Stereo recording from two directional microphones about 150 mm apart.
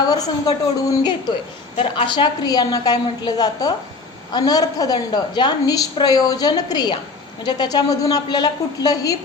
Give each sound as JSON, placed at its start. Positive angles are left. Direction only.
{"t": 0.0, "sound": "a woman's voice", "side_deg": 25}
{"t": 1.7, "sound": "a woman's voice", "side_deg": 40}